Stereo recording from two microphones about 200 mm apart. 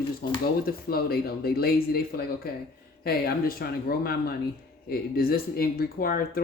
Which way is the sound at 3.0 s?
50° left (ahead or behind).